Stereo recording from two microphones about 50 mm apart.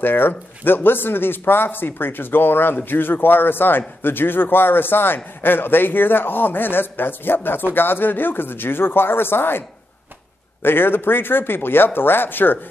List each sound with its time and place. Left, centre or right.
0.0 s speech: left